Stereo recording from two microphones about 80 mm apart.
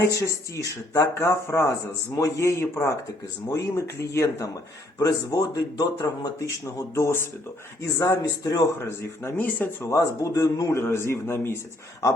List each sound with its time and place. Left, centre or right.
0.1 s speech: left
4.9 s speech: left
8.9 s speech: left
9.9 s speech: left
10.8 s speech: left